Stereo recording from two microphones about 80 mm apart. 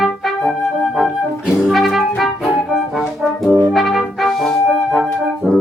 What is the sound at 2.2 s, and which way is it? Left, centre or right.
Music, centre.